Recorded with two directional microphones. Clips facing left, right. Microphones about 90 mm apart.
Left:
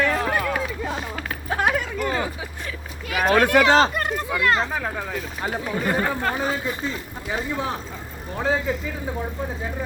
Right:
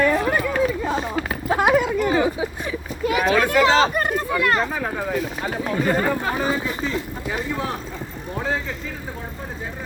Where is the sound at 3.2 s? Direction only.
45° left (ahead or behind).